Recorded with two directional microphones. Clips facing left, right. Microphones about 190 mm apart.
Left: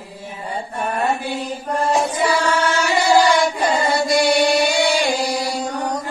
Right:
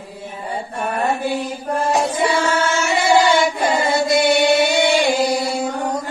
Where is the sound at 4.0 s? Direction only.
25° right (ahead or behind).